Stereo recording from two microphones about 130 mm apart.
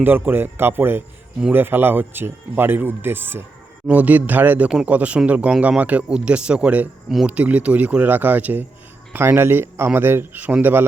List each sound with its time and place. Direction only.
0.0 s a man's voice: 15° right (ahead or behind)